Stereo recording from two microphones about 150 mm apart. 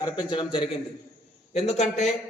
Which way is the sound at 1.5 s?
50° left (ahead or behind).